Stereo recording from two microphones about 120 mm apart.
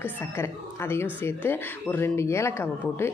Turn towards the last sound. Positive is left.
turn(degrees=20)  # may be behind; listen again after turning